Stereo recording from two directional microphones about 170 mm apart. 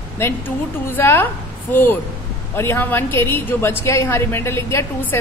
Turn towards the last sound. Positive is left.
turn(degrees=15)  # may be behind; listen again after turning